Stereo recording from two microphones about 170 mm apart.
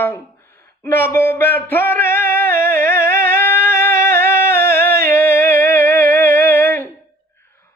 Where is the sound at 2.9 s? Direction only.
15° left (ahead or behind).